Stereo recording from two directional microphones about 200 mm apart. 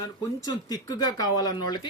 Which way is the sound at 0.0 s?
20° left (ahead or behind).